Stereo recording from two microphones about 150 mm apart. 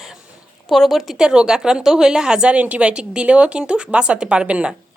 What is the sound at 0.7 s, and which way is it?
A woman's voice, centre (ahead or behind).